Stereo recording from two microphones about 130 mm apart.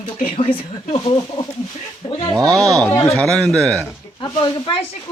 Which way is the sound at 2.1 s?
35° left (ahead or behind).